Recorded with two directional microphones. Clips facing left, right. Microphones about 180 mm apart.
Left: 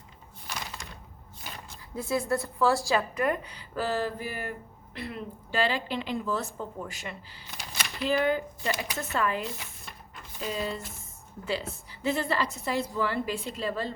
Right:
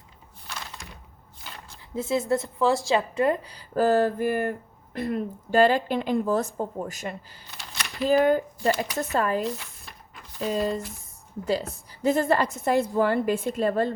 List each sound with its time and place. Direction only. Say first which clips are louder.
0.4 s a sound: left 1 dB; 15° left (ahead or behind)
2.0 s a woman's voice: right 4 dB; 20° right (ahead or behind)
3.8 s a woman's voice: right 9 dB; 50° right (ahead or behind)
7.8 s a sound: right 2 dB; centre (ahead or behind)
8.0 s speech: right 6 dB; 40° right (ahead or behind)
9.6 s cupboard open or close: left 1 dB; centre (ahead or behind)
11.4 s a woman's voice: right 5 dB; 40° right (ahead or behind)